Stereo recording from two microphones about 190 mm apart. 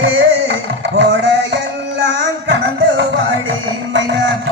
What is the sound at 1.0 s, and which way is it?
Music, 70° right (ahead or behind).